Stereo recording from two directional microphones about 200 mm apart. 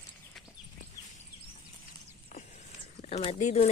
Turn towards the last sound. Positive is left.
turn(degrees=35)  # may be behind; listen again after turning